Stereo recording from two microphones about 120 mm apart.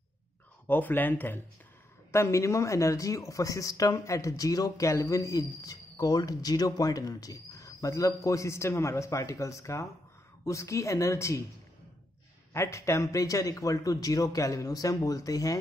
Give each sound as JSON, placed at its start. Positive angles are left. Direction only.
{"t": 0.7, "sound": "speech", "side_deg": 15}
{"t": 12.5, "sound": "speech", "side_deg": 25}